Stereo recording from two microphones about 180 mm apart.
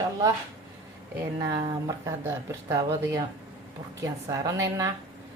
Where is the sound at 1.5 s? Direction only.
25° right (ahead or behind).